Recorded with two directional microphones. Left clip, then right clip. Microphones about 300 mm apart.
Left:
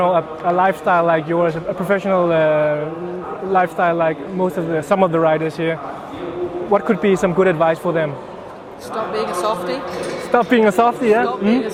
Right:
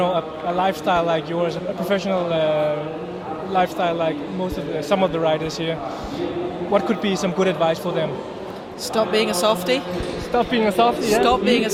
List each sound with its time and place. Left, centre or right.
0.0 s a man's voice: left
6.7 s a man's voice: left
9.1 s speech: right
10.3 s speech: left